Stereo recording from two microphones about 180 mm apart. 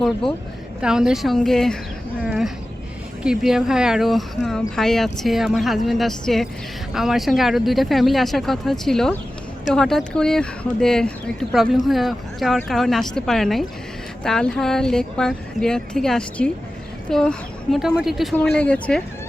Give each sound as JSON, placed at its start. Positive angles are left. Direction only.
{"t": 0.8, "sound": "speech", "side_deg": -5}
{"t": 2.2, "sound": "a sound", "side_deg": -5}
{"t": 3.2, "sound": "speech", "side_deg": -5}